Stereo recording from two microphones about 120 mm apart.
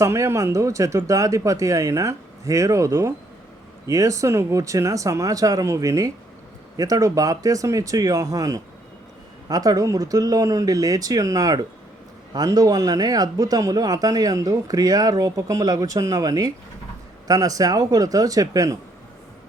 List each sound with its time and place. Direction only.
0.0 s speech: 25° right (ahead or behind)